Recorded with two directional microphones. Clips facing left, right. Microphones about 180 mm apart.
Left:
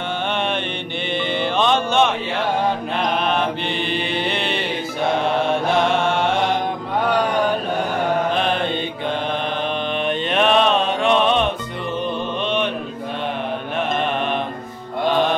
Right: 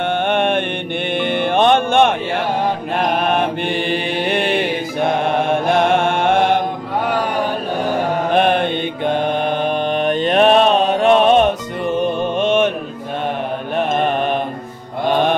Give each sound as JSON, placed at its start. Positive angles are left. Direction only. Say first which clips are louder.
{"t": 0.3, "sound": "mantra", "louder": "right 6 dB", "side_deg": -55}
{"t": 1.1, "sound": "music", "louder": "right 4 dB", "side_deg": -55}
{"t": 3.0, "sound": "mantra", "louder": "right 4 dB", "side_deg": -50}
{"t": 8.3, "sound": "mantra", "louder": "right 5 dB", "side_deg": -55}
{"t": 9.5, "sound": "mantra", "louder": "right 5 dB", "side_deg": -40}
{"t": 12.0, "sound": "music", "louder": "right 6 dB", "side_deg": -45}
{"t": 13.7, "sound": "mantra", "louder": "right 5 dB", "side_deg": -40}